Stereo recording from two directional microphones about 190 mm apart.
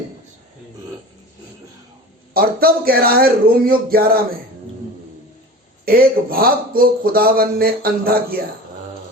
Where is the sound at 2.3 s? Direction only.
50° right (ahead or behind).